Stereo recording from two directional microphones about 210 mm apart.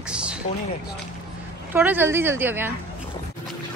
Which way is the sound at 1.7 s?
10° right (ahead or behind).